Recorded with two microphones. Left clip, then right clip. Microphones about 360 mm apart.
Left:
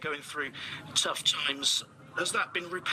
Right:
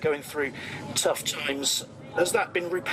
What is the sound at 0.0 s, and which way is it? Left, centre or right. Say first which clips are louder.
Speech: right 7 dB; left.